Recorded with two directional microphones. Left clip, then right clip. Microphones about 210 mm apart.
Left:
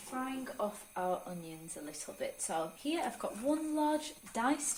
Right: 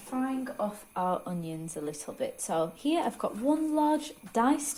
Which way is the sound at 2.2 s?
40° right (ahead or behind).